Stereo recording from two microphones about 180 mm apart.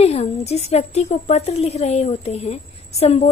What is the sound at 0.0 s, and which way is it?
A woman's voice, 35° left (ahead or behind).